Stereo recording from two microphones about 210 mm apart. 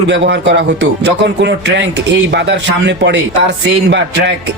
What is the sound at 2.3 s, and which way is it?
A man's voice, 55° right (ahead or behind).